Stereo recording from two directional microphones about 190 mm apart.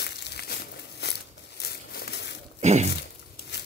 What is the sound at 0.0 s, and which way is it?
Crumpling, 60° left (ahead or behind).